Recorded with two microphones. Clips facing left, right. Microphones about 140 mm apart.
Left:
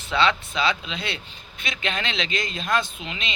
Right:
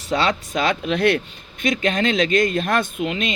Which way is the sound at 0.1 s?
40° right (ahead or behind).